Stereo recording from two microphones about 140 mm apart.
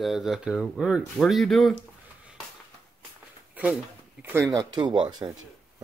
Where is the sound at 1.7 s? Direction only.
10° right (ahead or behind).